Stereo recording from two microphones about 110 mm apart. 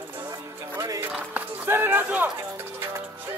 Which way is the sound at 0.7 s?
30° right (ahead or behind).